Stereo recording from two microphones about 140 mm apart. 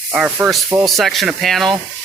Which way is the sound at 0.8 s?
Centre (ahead or behind).